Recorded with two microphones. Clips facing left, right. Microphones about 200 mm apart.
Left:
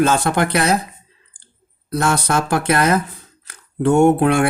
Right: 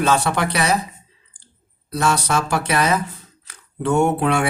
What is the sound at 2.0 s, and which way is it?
Speech, 55° left (ahead or behind).